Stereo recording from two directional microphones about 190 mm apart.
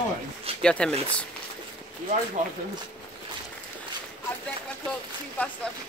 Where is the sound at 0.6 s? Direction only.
5° left (ahead or behind).